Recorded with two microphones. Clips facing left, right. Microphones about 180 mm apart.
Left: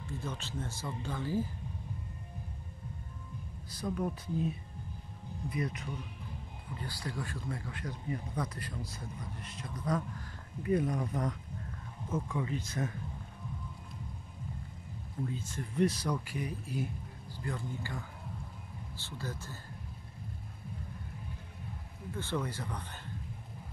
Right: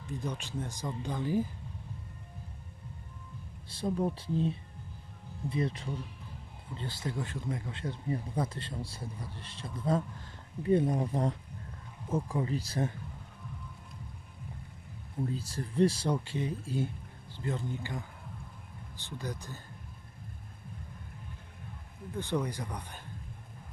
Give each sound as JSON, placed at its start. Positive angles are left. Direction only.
{"t": 0.0, "sound": "speech", "side_deg": -15}
{"t": 3.6, "sound": "speech", "side_deg": -30}
{"t": 15.2, "sound": "speech", "side_deg": -35}
{"t": 22.1, "sound": "speech", "side_deg": -15}